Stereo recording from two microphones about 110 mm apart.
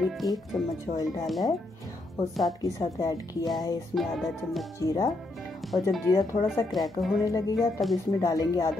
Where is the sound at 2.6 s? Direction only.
35° left (ahead or behind).